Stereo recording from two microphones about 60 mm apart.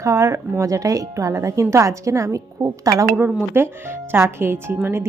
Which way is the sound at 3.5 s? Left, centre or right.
Right.